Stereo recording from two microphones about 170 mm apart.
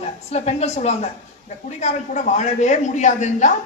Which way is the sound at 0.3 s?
40° left (ahead or behind).